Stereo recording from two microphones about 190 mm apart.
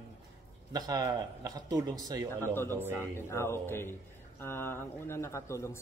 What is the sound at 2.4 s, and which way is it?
Speech, 10° left (ahead or behind).